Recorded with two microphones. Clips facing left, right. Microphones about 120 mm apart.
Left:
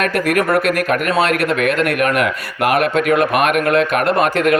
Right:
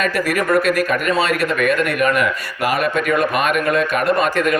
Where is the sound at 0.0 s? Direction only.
60° left (ahead or behind).